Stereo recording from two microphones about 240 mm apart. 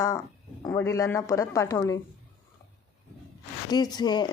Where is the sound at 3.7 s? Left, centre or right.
Centre.